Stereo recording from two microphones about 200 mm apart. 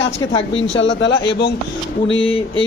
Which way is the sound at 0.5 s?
70° left (ahead or behind).